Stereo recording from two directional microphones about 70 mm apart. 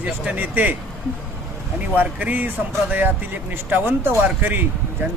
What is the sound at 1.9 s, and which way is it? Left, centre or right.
Speech, right.